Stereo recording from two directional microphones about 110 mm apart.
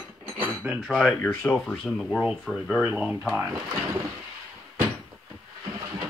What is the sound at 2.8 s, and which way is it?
Speech, 15° right (ahead or behind).